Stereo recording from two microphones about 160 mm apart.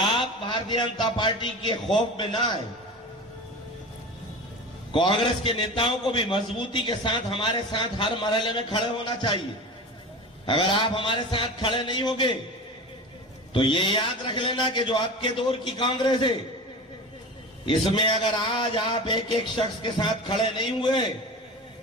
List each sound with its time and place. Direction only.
0.0 s a man's voice: 30° left (ahead or behind)
4.9 s a man's voice: 30° left (ahead or behind)
10.4 s a man's voice: 30° left (ahead or behind)
13.5 s a man's voice: 30° left (ahead or behind)
17.7 s a man's voice: 30° left (ahead or behind)